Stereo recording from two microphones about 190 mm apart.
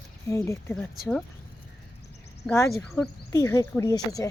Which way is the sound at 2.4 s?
15° left (ahead or behind).